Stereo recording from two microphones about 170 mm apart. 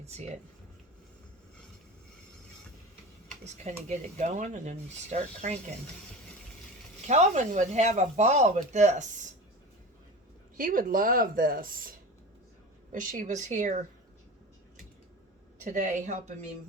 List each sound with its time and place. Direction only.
0.0 s speech: 40° right (ahead or behind)
3.4 s speech: 40° right (ahead or behind)
7.1 s speech: 45° right (ahead or behind)
10.6 s a woman's voice: 55° right (ahead or behind)
15.6 s speech: 50° right (ahead or behind)